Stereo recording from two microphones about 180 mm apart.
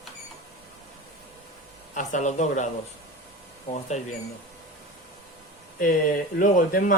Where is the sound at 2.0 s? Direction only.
40° left (ahead or behind).